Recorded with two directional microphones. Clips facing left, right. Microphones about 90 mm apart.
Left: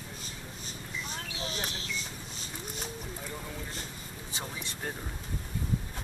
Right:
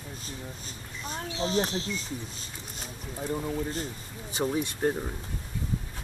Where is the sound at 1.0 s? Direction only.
30° right (ahead or behind).